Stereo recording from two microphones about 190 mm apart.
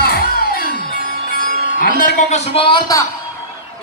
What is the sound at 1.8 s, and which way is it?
Speech, 45° left (ahead or behind).